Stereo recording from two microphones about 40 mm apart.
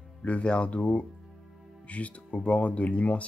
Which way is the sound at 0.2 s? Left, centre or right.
Left.